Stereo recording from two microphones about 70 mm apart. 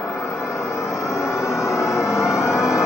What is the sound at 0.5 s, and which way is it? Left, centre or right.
Vehicle, left.